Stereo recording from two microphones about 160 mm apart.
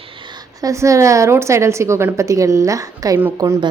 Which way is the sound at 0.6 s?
20° right (ahead or behind).